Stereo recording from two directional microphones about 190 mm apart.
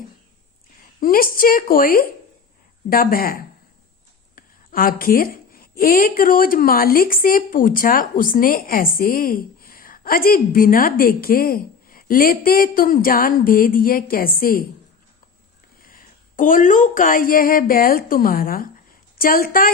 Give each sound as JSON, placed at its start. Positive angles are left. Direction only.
{"t": 0.9, "sound": "a woman's voice", "side_deg": 50}
{"t": 15.8, "sound": "a woman's voice", "side_deg": 45}